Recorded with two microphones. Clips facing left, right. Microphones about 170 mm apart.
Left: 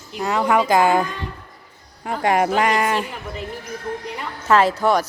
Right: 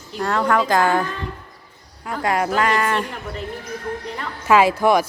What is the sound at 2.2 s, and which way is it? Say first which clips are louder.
Speech: left 3 dB; 20° left (ahead or behind).